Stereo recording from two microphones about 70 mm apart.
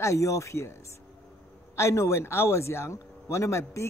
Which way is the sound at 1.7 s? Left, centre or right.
Left.